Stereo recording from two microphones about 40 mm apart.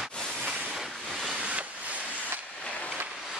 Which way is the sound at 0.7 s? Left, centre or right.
Centre.